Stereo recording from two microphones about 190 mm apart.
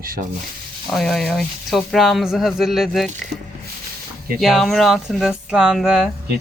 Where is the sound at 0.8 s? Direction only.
Centre (ahead or behind).